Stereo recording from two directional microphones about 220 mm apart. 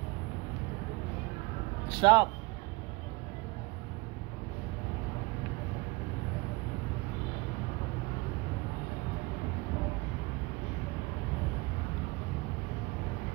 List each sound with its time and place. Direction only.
1.9 s speech: 20° right (ahead or behind)